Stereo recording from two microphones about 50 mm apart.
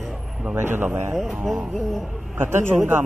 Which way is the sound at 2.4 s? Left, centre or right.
Right.